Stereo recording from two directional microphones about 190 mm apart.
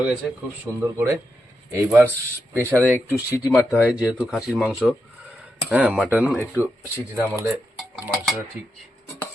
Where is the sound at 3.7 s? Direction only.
Centre (ahead or behind).